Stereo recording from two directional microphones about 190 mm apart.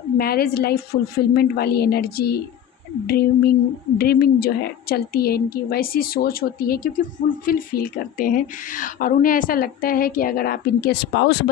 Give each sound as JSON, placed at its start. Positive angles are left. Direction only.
{"t": 0.2, "sound": "a woman's voice", "side_deg": 55}